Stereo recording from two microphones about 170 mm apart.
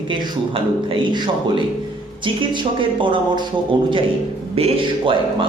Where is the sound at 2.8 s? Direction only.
30° right (ahead or behind).